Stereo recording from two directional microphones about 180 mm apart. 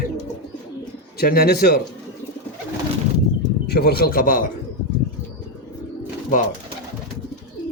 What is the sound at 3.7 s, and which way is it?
Speech, 60° left (ahead or behind).